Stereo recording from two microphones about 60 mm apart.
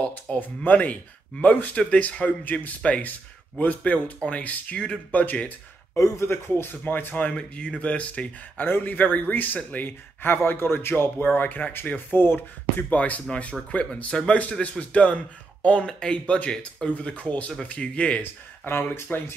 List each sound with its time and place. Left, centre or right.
0.0 s speech: left
4.7 s speech: centre
5.1 s speech: left
5.9 s speech: left
6.2 s speech: left
8.6 s speech: left
12.9 s speech: left
18.2 s speech: left